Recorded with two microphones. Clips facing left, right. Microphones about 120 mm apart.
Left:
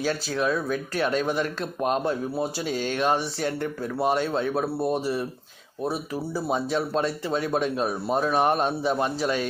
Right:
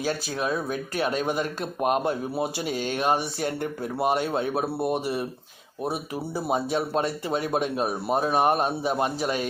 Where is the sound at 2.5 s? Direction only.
50° right (ahead or behind).